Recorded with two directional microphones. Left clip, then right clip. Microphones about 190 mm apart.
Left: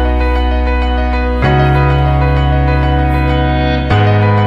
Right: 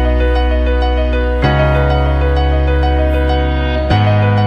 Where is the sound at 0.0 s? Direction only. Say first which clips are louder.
Even; centre (ahead or behind).